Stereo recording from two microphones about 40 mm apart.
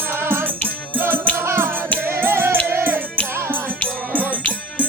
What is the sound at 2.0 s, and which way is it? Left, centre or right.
Music, right.